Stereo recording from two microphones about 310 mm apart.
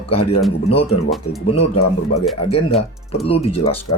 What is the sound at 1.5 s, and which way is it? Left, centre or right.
Speech, centre.